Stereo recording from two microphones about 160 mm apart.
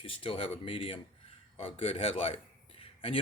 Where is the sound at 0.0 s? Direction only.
35° left (ahead or behind).